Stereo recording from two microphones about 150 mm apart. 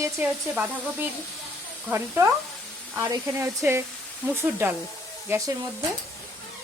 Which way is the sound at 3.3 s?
15° right (ahead or behind).